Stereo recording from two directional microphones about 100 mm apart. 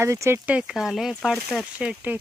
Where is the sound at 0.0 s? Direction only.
30° right (ahead or behind).